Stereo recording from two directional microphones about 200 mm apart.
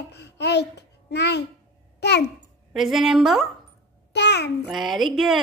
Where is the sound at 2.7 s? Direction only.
Centre (ahead or behind).